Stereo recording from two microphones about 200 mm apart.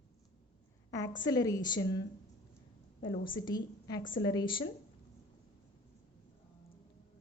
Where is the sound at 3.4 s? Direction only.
20° left (ahead or behind).